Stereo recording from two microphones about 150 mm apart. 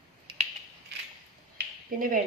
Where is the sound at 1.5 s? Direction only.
65° right (ahead or behind).